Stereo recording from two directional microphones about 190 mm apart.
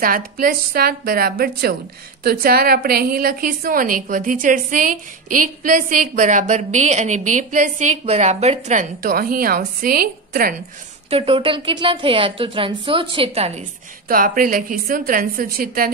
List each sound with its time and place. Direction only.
0.0 s a woman's voice: 50° right (ahead or behind)
11.1 s a woman's voice: 30° right (ahead or behind)
14.0 s a woman's voice: 45° right (ahead or behind)